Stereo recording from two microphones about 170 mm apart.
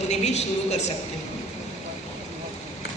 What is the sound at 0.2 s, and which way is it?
Speech, 40° left (ahead or behind).